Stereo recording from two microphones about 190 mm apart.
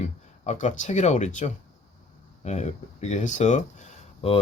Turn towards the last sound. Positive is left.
turn(degrees=30)  # may be behind; listen again after turning